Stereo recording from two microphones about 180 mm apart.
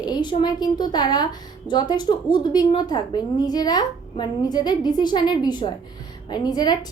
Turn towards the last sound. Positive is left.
turn(degrees=20)  # may be behind; listen again after turning